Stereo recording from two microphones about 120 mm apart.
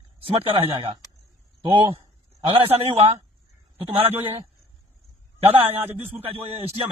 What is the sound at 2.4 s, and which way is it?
Speech, 50° right (ahead or behind).